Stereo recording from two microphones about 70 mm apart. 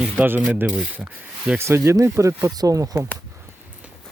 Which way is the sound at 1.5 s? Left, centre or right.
Right.